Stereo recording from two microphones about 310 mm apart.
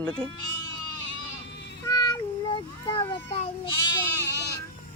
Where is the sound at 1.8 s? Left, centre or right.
Centre.